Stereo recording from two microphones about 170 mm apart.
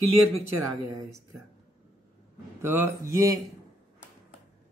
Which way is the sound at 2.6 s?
15° right (ahead or behind).